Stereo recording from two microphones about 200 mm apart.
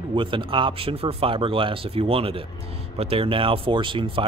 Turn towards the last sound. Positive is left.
turn(degrees=-25)  # may be behind; listen again after turning